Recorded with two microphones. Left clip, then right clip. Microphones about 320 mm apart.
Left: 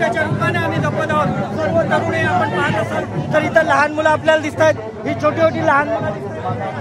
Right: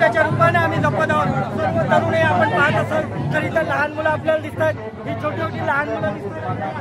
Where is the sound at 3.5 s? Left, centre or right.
Left.